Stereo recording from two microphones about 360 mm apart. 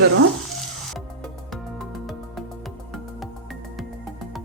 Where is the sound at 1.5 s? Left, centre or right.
Centre.